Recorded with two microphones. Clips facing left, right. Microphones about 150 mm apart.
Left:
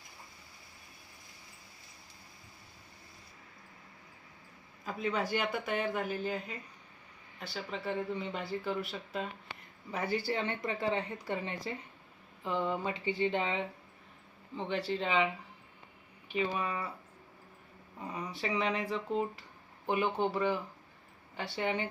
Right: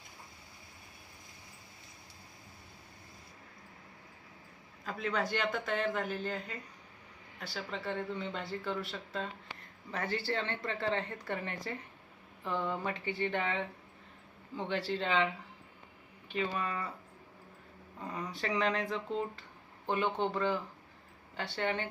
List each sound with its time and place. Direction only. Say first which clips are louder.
4.9 s speech: left 1 dB; 5° left (ahead or behind)
14.5 s speech: left 1 dB; centre (ahead or behind)
16.3 s speech: left 2 dB; 5° left (ahead or behind)
18.0 s speech: even; centre (ahead or behind)